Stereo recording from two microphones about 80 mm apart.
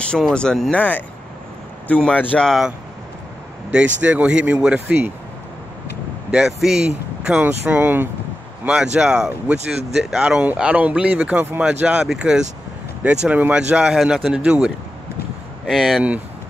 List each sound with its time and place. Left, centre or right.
0.3 s a man's voice: centre
3.7 s speech: centre
6.3 s speech: centre
7.4 s speech: right
8.6 s speech: centre
15.6 s speech: centre